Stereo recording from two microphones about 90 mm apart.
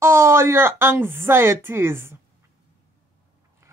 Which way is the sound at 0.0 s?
30° right (ahead or behind).